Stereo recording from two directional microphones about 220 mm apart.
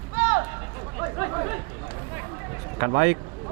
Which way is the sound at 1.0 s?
20° right (ahead or behind).